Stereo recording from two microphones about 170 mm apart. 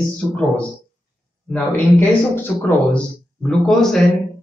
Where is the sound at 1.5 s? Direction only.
10° left (ahead or behind).